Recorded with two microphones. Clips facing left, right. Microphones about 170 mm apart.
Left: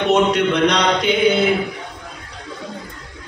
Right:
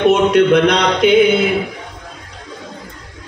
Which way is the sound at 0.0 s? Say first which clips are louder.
Right 4 dB; 50° right (ahead or behind).